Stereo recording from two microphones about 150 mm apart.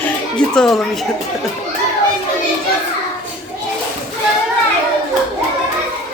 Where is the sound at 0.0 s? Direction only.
5° left (ahead or behind).